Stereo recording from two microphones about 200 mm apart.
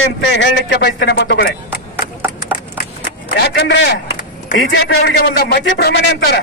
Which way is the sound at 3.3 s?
60° left (ahead or behind).